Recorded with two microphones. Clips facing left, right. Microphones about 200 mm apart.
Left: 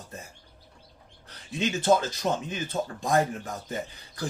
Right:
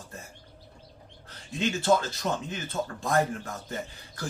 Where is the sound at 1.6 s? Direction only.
15° left (ahead or behind).